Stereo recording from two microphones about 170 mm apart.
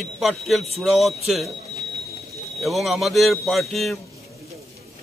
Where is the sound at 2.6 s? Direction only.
Centre (ahead or behind).